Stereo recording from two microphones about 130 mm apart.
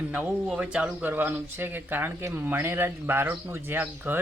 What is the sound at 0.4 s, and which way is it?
Speech, 5° right (ahead or behind).